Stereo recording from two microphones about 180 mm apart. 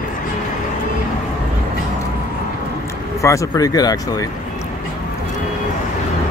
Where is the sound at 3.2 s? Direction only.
20° left (ahead or behind).